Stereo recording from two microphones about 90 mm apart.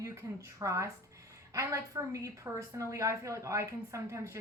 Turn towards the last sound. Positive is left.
turn(degrees=-35)  # may be behind; listen again after turning